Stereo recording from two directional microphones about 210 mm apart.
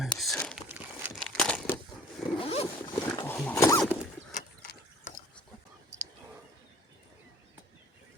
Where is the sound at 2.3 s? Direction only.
25° left (ahead or behind).